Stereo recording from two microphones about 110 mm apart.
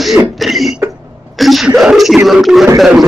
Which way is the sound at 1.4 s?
Centre (ahead or behind).